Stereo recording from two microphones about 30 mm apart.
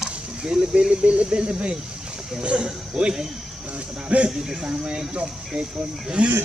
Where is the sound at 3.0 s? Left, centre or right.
Right.